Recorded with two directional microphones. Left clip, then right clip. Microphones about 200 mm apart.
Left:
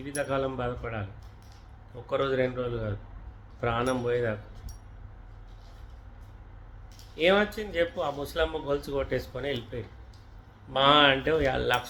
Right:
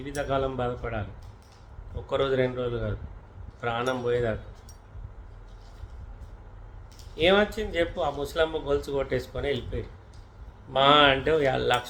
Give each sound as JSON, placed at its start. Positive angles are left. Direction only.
{"t": 0.0, "sound": "speech", "side_deg": -5}
{"t": 2.0, "sound": "speech", "side_deg": -5}
{"t": 7.2, "sound": "speech", "side_deg": -5}
{"t": 10.7, "sound": "speech", "side_deg": 0}